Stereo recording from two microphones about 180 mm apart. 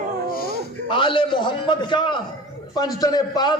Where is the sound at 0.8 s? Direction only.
25° left (ahead or behind).